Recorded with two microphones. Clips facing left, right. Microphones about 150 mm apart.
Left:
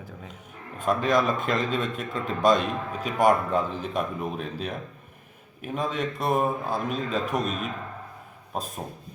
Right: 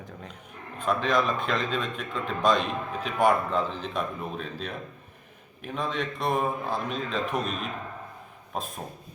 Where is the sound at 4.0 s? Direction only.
10° left (ahead or behind).